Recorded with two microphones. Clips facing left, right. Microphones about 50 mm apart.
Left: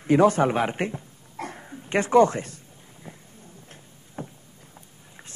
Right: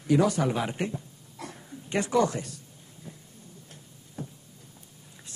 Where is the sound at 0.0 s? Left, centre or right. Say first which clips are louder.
Left 5 dB; left.